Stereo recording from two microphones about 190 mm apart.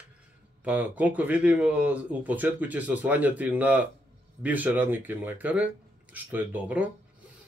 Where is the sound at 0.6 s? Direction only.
10° right (ahead or behind).